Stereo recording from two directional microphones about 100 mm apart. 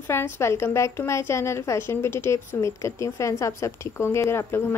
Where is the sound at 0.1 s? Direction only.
25° left (ahead or behind).